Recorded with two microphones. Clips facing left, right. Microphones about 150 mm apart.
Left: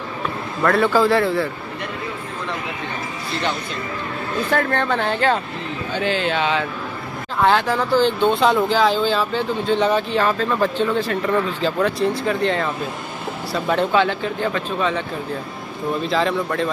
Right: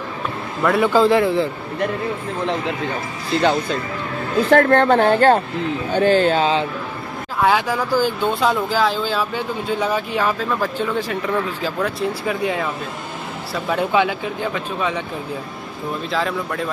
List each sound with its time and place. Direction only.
0.6 s speech: 10° right (ahead or behind)
4.5 s speech: 50° right (ahead or behind); by 6.6 s 35° right (ahead or behind)
7.3 s speech: 10° right (ahead or behind)
16.1 s speech: centre (ahead or behind)